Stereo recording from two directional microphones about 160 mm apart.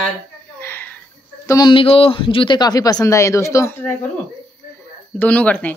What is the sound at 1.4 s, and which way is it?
Speech, 25° left (ahead or behind).